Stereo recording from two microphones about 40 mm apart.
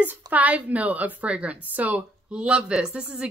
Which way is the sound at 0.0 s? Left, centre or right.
Right.